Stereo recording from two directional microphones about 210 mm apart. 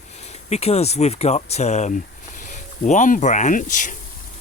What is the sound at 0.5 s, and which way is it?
Speech, 30° left (ahead or behind).